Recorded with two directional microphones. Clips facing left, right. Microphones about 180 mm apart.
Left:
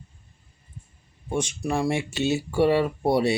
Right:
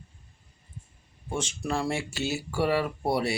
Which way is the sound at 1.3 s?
15° left (ahead or behind).